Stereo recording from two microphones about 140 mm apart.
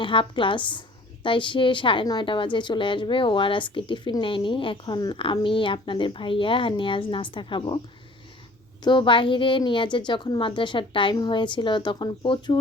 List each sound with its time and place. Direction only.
0.0 s a woman's voice: 35° left (ahead or behind)
8.8 s a woman's voice: 35° left (ahead or behind)